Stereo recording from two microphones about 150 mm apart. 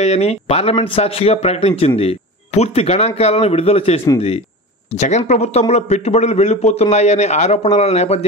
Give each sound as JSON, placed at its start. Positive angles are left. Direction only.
{"t": 0.0, "sound": "a man's voice", "side_deg": 45}